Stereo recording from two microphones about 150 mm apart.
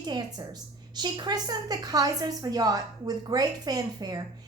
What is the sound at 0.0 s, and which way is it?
A woman's voice, 25° right (ahead or behind).